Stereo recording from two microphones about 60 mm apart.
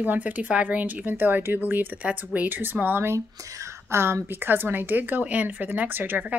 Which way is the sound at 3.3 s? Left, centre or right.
Right.